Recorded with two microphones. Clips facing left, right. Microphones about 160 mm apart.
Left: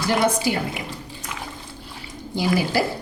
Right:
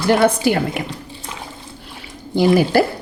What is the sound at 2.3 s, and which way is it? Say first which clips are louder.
Speech: right 8 dB; 60° right (ahead or behind).